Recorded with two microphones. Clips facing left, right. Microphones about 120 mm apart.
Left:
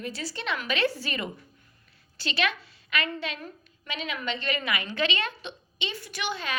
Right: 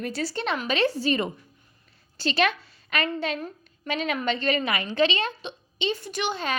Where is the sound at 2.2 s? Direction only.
40° right (ahead or behind).